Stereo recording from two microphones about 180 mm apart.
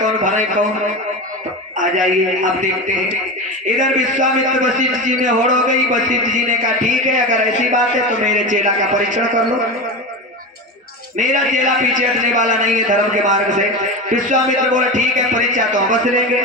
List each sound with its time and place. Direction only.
0.0 s a sound: 45° right (ahead or behind)
1.8 s a man's voice: 45° right (ahead or behind)
11.2 s a man's voice: 45° right (ahead or behind)